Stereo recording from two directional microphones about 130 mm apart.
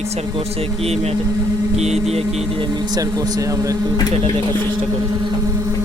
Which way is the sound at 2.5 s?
35° right (ahead or behind).